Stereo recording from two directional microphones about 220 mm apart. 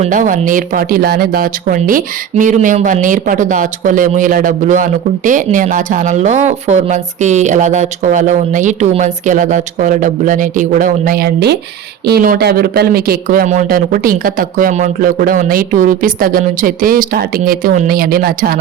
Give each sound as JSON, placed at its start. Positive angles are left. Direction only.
{"t": 0.0, "sound": "speech", "side_deg": -35}